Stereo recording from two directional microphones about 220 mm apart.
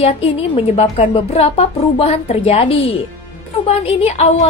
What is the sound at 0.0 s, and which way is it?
A woman's voice, 25° left (ahead or behind).